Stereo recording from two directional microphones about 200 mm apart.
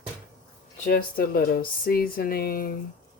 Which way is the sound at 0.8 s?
45° left (ahead or behind).